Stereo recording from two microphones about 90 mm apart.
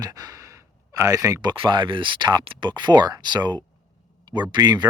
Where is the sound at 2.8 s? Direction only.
55° right (ahead or behind).